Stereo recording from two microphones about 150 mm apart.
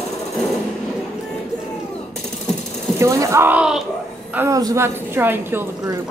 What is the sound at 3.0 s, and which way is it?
Speech, 20° right (ahead or behind).